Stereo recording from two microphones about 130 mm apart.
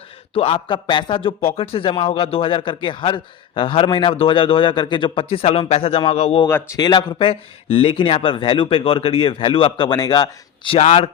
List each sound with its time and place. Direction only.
0.3 s a man's voice: 45° left (ahead or behind)
6.7 s a man's voice: 30° left (ahead or behind)